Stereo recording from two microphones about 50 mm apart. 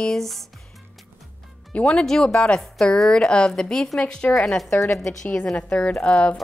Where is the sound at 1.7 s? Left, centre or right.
Left.